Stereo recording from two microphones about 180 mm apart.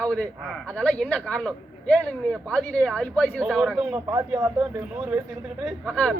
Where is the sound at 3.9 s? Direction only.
15° right (ahead or behind).